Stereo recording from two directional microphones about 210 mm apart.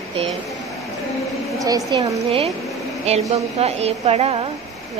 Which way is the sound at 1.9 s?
25° right (ahead or behind).